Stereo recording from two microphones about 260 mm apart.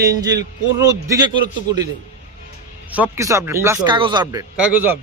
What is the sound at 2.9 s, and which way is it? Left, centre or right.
A man's voice, centre.